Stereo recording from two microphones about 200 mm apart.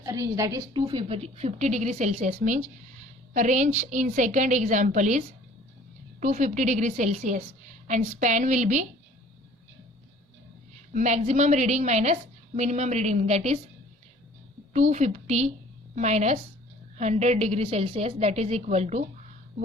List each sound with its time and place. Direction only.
0.0 s a woman's voice: 15° right (ahead or behind); by 8.9 s 40° right (ahead or behind)
10.9 s a woman's voice: 35° right (ahead or behind)
14.7 s a woman's voice: 35° right (ahead or behind)